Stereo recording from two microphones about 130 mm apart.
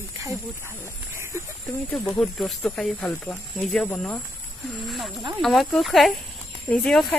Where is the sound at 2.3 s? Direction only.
Centre (ahead or behind).